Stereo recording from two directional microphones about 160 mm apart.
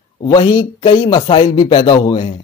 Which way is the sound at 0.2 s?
30° left (ahead or behind).